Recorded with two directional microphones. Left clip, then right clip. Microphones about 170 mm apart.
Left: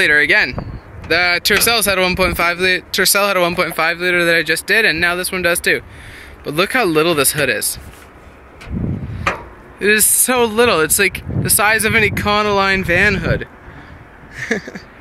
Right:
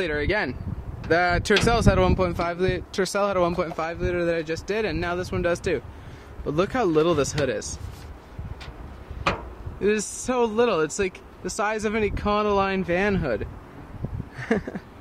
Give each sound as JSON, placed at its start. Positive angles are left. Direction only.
{"t": 0.0, "sound": "speech", "side_deg": 0}
{"t": 1.0, "sound": "speech", "side_deg": -20}
{"t": 3.7, "sound": "speech", "side_deg": 10}
{"t": 4.7, "sound": "speech", "side_deg": 0}
{"t": 9.8, "sound": "speech", "side_deg": 0}